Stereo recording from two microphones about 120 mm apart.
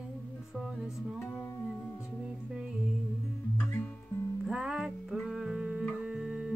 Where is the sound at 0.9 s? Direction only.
15° left (ahead or behind).